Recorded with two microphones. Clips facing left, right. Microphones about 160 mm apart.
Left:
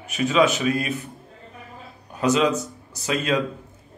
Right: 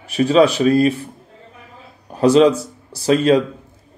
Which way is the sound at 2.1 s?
35° right (ahead or behind).